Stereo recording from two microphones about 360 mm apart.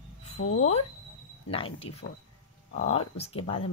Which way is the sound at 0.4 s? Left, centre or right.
Left.